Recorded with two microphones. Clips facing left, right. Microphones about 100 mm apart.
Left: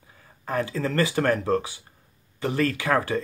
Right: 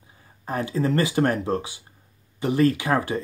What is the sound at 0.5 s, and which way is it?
Speech, 20° right (ahead or behind).